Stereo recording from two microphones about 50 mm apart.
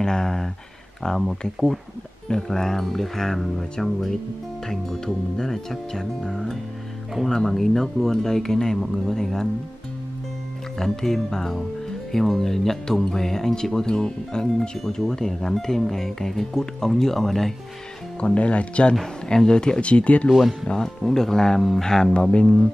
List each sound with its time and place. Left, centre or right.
0.0 s speech: centre
10.8 s speech: centre
18.2 s speech: left
19.2 s speech: centre
20.2 s speech: centre
20.6 s speech: centre